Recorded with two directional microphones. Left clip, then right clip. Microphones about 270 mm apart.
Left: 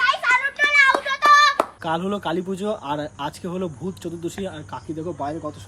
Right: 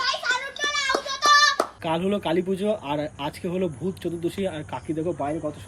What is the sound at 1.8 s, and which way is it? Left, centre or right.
Speech, centre.